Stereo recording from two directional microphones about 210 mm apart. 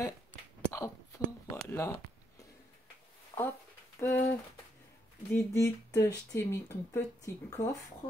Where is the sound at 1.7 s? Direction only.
10° left (ahead or behind).